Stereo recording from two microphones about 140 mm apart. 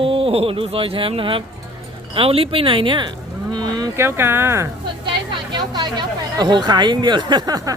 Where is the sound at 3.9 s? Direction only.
15° right (ahead or behind).